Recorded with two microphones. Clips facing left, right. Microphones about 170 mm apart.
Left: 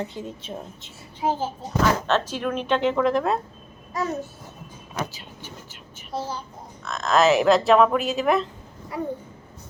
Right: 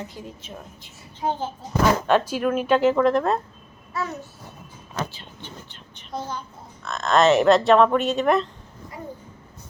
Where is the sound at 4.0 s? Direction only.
40° left (ahead or behind).